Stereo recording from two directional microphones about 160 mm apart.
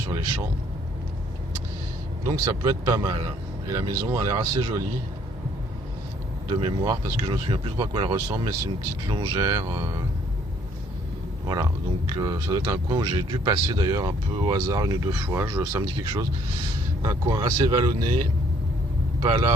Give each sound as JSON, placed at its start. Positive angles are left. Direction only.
{"t": 2.2, "sound": "speech", "side_deg": -25}
{"t": 6.5, "sound": "speech", "side_deg": -30}
{"t": 11.4, "sound": "speech", "side_deg": -25}
{"t": 19.2, "sound": "speech", "side_deg": -35}